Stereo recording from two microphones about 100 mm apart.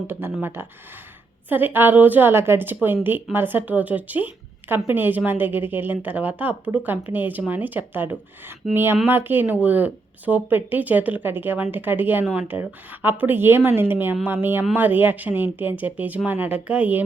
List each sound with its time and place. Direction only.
0.1 s speech: 20° right (ahead or behind)